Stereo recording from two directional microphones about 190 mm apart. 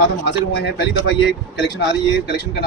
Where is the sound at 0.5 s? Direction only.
65° left (ahead or behind).